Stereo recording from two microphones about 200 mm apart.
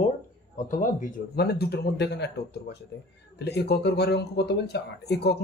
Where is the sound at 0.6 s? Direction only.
40° left (ahead or behind).